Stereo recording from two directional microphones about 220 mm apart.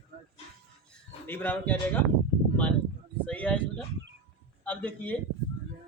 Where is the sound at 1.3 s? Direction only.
10° left (ahead or behind).